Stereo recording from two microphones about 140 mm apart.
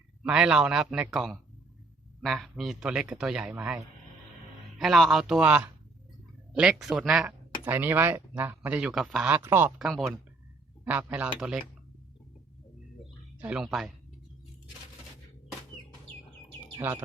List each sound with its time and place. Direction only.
0.2 s a man's voice: 5° right (ahead or behind)
4.8 s a man's voice: centre (ahead or behind)
9.4 s speech: 15° right (ahead or behind)
9.7 s a man's voice: 5° right (ahead or behind)
13.4 s a man's voice: 5° right (ahead or behind)
16.7 s speech: 15° right (ahead or behind)